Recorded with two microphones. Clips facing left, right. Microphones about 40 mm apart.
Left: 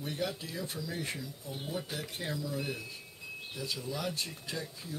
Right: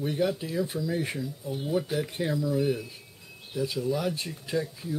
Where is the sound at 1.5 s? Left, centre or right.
Centre.